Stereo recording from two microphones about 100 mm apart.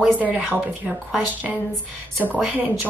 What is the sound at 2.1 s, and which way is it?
Speech, 15° right (ahead or behind).